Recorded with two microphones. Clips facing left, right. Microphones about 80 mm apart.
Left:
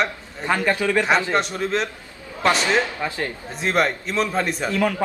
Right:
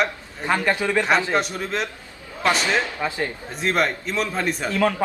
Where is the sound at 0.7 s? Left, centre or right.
Centre.